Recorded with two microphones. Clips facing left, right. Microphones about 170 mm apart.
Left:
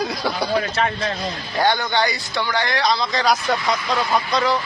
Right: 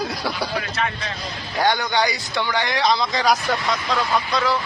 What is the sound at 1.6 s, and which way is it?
A man's voice, 10° right (ahead or behind).